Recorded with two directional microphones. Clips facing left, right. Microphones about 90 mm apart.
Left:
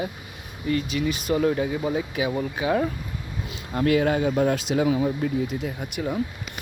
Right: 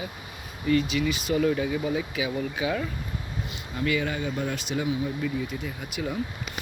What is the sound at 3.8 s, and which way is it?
Speech, 60° left (ahead or behind).